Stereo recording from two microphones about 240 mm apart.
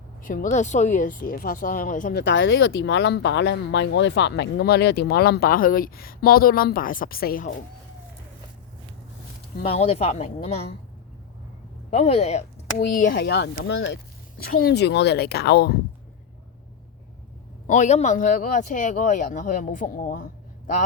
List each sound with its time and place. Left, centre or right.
0.2 s speech: left
9.7 s speech: left
11.9 s speech: left
17.7 s speech: left